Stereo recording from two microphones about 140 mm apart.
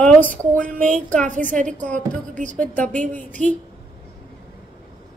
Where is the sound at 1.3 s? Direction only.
65° right (ahead or behind).